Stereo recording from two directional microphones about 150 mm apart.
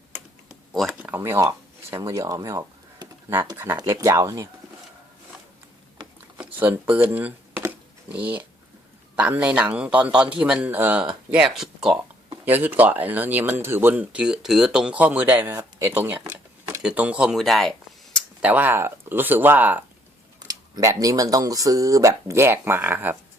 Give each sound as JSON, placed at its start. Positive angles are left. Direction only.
{"t": 0.7, "sound": "speech", "side_deg": 0}
{"t": 6.3, "sound": "a sound", "side_deg": -10}
{"t": 6.9, "sound": "speech", "side_deg": -15}
{"t": 18.4, "sound": "speech", "side_deg": -10}
{"t": 20.5, "sound": "speech", "side_deg": -25}